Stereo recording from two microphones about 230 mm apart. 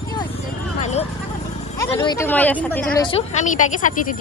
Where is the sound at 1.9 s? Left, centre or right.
Centre.